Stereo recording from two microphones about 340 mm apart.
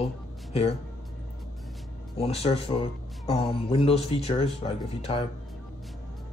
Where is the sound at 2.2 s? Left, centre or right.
Centre.